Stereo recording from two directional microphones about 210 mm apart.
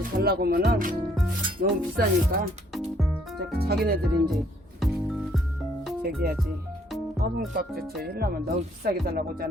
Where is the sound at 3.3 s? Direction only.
50° right (ahead or behind).